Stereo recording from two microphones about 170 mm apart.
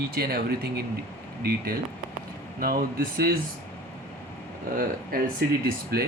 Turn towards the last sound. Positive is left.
turn(degrees=-65)  # may be behind; listen again after turning